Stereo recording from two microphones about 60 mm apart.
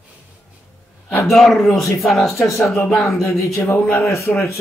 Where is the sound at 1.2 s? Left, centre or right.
Centre.